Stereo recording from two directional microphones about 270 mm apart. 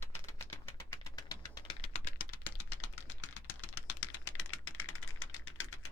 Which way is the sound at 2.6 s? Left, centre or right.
Left.